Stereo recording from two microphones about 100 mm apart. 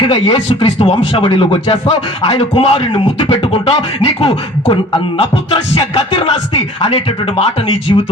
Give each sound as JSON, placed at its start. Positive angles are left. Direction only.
{"t": 0.0, "sound": "speech", "side_deg": 60}
{"t": 1.2, "sound": "speech", "side_deg": 55}
{"t": 2.2, "sound": "music", "side_deg": 85}
{"t": 3.5, "sound": "beatboxing", "side_deg": 75}
{"t": 5.5, "sound": "music", "side_deg": 80}